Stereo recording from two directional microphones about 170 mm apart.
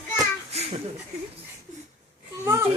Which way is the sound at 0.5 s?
40° right (ahead or behind).